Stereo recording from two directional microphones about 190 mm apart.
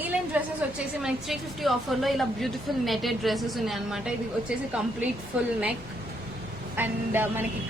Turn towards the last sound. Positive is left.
turn(degrees=-10)  # may be behind; listen again after turning